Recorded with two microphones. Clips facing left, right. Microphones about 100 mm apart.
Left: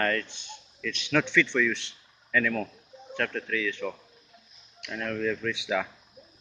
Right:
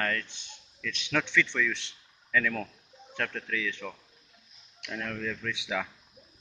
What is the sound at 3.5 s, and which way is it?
Speech, 15° right (ahead or behind).